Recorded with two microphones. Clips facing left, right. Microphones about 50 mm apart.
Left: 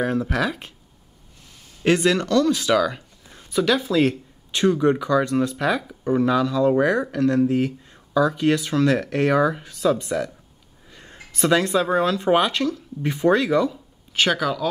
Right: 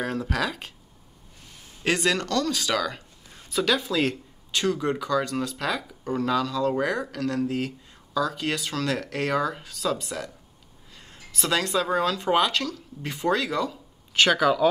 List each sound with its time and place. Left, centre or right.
0.0 s speech: centre
1.9 s speech: centre
4.5 s speech: centre
13.7 s a sound: centre
14.3 s speech: centre